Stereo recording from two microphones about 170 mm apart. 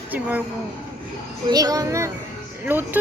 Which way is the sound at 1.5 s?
20° right (ahead or behind).